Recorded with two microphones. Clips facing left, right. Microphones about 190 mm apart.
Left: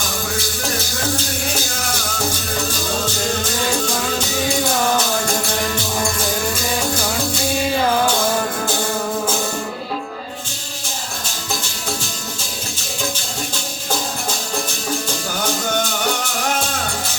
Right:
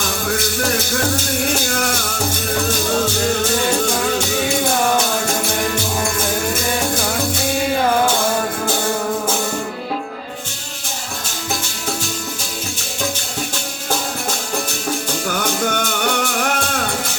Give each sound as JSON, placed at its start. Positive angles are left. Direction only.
{"t": 15.3, "sound": "music", "side_deg": -60}